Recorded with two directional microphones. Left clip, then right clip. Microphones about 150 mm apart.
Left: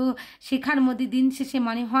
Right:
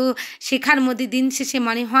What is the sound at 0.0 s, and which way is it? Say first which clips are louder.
A woman's voice: right 6 dB; 20° right (ahead or behind).